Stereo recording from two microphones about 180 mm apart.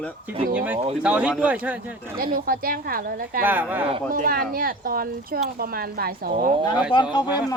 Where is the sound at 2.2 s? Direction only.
50° right (ahead or behind).